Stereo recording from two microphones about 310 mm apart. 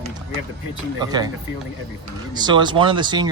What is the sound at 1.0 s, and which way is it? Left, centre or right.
Speech, centre.